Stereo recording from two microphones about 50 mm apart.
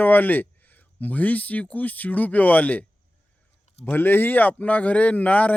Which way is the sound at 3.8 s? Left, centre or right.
Left.